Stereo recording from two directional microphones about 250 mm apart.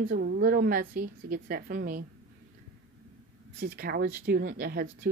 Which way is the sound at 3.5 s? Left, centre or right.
Right.